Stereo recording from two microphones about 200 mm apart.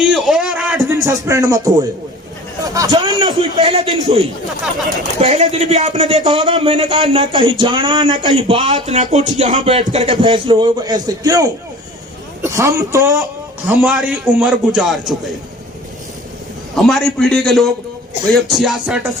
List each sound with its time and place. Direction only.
0.0 s a sound: 5° right (ahead or behind)
0.9 s a man's voice: 15° right (ahead or behind)
5.2 s a man's voice: 35° right (ahead or behind)
6.2 s speech: 20° right (ahead or behind)
13.7 s a man's voice: centre (ahead or behind)
16.7 s a man's voice: centre (ahead or behind)